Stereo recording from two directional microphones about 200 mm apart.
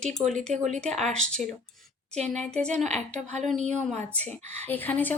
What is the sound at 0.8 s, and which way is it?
Speech, 5° left (ahead or behind).